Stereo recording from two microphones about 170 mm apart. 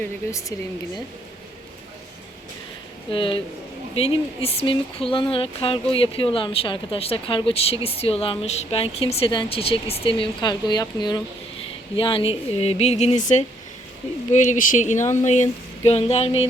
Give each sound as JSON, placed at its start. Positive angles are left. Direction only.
{"t": 0.0, "sound": "speech", "side_deg": 15}
{"t": 3.1, "sound": "speech", "side_deg": 30}